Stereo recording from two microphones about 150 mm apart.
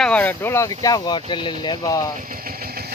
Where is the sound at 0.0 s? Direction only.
10° left (ahead or behind); by 2.0 s 30° left (ahead or behind).